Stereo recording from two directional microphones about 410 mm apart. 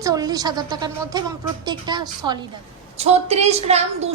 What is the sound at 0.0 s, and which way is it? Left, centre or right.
A woman's voice, centre.